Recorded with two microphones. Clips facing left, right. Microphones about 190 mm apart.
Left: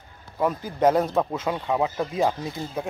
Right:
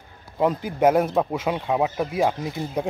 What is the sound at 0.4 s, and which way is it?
Speech, 20° right (ahead or behind).